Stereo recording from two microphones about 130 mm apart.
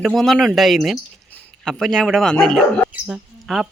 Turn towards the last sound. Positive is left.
turn(degrees=-5)  # may be behind; listen again after turning